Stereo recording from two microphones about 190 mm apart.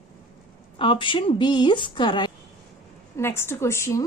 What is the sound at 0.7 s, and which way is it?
A woman's voice, 25° left (ahead or behind).